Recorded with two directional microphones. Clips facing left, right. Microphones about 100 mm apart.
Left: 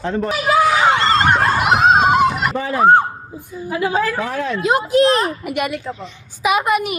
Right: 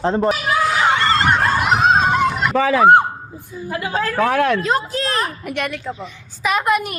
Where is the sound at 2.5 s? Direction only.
90° right.